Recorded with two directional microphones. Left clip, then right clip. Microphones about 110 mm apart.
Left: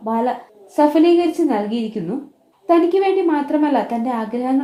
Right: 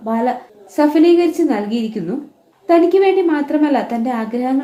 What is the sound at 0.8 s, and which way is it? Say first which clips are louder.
A woman's voice: right 2 dB; 30° left (ahead or behind).